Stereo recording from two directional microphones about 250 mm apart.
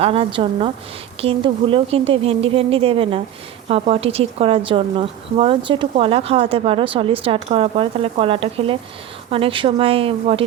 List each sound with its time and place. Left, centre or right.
0.0 s a woman's voice: right